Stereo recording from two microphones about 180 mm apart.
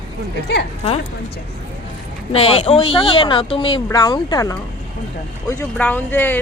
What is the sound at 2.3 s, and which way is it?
Speech, 35° left (ahead or behind).